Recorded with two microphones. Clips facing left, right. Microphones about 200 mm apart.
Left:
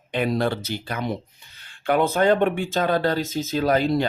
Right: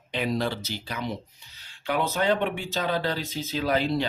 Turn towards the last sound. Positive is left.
turn(degrees=45)  # may be behind; listen again after turning